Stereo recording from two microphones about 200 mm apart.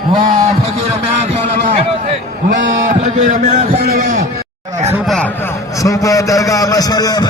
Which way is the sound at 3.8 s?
45° right (ahead or behind).